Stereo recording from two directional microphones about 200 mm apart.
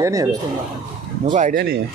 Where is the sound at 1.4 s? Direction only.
45° right (ahead or behind).